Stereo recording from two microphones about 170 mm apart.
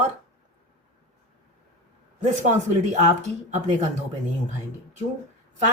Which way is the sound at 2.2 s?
45° right (ahead or behind).